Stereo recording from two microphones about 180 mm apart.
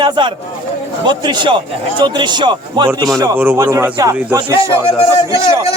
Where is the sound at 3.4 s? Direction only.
10° right (ahead or behind).